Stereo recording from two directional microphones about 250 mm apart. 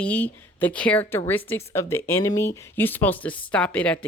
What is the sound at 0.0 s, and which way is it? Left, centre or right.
Speech, centre.